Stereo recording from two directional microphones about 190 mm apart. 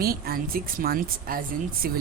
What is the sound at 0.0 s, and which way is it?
Speech, 50° right (ahead or behind).